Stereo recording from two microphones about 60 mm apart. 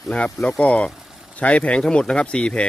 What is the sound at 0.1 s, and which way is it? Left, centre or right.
Speech, centre.